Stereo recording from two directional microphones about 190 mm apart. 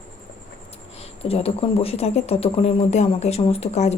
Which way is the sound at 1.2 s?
30° left (ahead or behind).